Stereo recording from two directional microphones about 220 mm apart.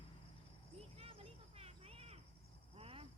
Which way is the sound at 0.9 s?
25° right (ahead or behind).